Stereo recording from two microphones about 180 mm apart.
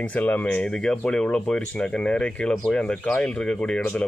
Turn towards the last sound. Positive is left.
turn(degrees=5)  # may be behind; listen again after turning